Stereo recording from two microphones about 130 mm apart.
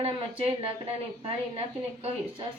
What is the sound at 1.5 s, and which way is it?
Speech, 50° right (ahead or behind).